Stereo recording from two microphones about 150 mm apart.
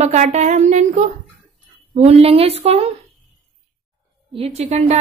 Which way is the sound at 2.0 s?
45° right (ahead or behind).